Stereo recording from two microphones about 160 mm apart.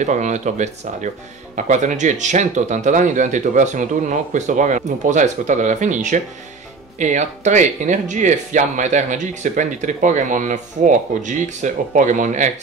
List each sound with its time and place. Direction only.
0.0 s speech: 50° right (ahead or behind)